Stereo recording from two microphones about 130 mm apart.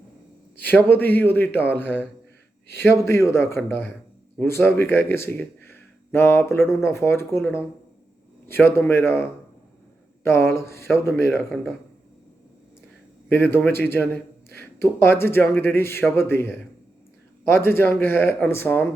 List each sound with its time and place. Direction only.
0.5 s a man's voice: 15° left (ahead or behind)
11.5 s speech: centre (ahead or behind)
13.2 s a man's voice: 15° left (ahead or behind)